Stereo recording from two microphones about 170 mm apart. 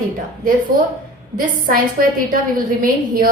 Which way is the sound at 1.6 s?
55° right (ahead or behind).